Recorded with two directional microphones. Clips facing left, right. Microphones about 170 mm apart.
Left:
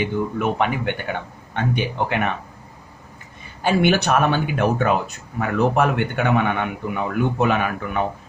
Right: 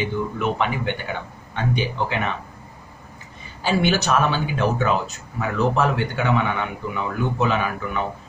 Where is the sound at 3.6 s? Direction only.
55° left (ahead or behind).